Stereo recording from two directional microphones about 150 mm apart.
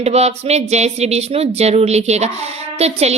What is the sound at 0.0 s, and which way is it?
Speech, 45° right (ahead or behind).